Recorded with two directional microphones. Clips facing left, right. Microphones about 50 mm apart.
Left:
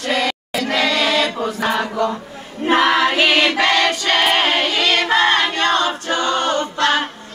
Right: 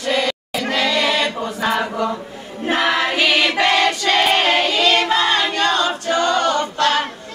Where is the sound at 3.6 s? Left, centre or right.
Left.